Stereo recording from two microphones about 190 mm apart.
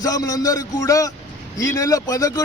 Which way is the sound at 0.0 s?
20° left (ahead or behind).